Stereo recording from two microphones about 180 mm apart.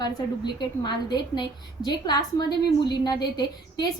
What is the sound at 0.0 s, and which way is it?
A woman's voice, 25° left (ahead or behind).